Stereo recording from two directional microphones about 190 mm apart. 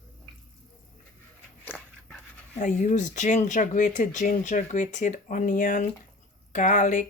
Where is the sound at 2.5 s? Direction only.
40° left (ahead or behind).